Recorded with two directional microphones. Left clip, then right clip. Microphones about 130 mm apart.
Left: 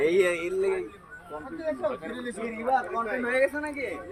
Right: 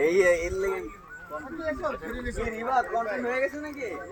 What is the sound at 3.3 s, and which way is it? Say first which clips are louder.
Speech: left 3 dB; centre (ahead or behind).